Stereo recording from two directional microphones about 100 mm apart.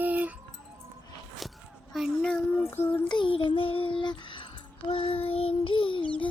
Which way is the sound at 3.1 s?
60° left (ahead or behind).